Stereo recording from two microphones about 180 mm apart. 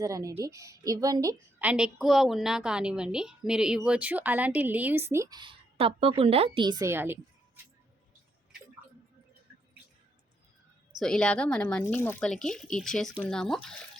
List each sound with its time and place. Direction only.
0.0 s a woman's voice: 20° right (ahead or behind)
1.6 s a woman's voice: 5° right (ahead or behind)
11.0 s speech: 5° left (ahead or behind)